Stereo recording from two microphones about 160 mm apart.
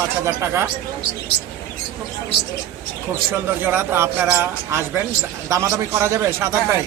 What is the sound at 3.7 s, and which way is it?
Speech, 15° right (ahead or behind).